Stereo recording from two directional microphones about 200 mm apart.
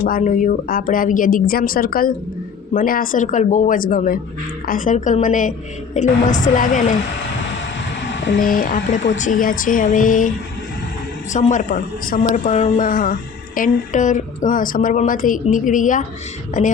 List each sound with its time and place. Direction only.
0.0 s a woman's voice: 45° left (ahead or behind)
8.0 s a sound: 65° left (ahead or behind)
8.4 s a woman's voice: 40° left (ahead or behind)